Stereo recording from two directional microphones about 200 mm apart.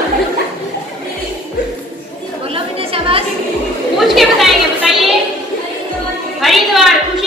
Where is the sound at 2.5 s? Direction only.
30° right (ahead or behind).